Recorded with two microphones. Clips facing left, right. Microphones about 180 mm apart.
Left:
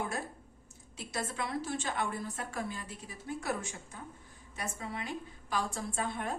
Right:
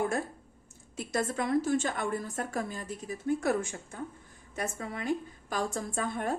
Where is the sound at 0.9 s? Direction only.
50° right (ahead or behind).